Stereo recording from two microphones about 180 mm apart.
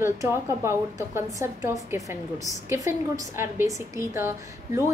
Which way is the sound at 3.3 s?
15° right (ahead or behind).